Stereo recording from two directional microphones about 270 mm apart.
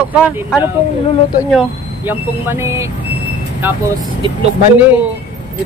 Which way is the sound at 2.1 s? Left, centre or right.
Centre.